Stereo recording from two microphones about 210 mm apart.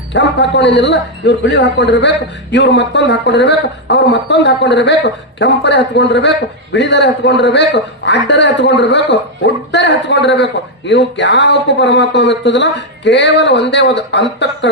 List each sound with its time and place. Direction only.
0.1 s a man's voice: 55° left (ahead or behind)